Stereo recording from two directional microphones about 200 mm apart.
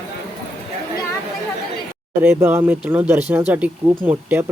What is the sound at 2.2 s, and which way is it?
Speech, 10° right (ahead or behind).